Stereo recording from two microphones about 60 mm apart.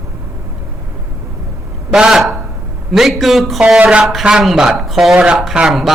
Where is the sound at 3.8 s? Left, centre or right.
Centre.